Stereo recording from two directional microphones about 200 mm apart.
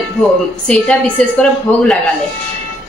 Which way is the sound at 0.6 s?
5° left (ahead or behind).